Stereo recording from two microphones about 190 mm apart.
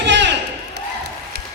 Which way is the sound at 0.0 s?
65° right (ahead or behind).